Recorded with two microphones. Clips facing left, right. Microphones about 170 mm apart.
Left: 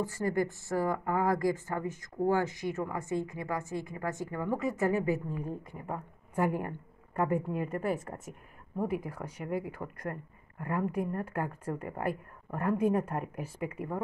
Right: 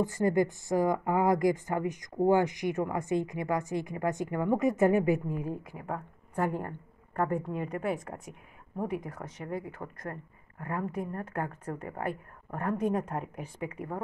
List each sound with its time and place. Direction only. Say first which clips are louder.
0.0 s speech: right 4 dB; 20° right (ahead or behind)
6.3 s speech: left 1 dB; 10° left (ahead or behind)
11.2 s speech: even; 10° left (ahead or behind)